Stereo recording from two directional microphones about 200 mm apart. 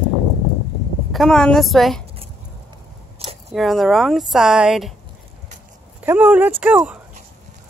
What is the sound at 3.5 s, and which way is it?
Speech, centre (ahead or behind).